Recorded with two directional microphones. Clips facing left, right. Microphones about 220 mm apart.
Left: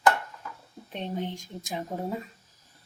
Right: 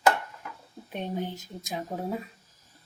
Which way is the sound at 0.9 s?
10° right (ahead or behind).